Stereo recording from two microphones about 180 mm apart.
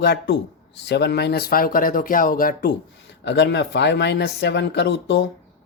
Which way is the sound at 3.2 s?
70° left (ahead or behind).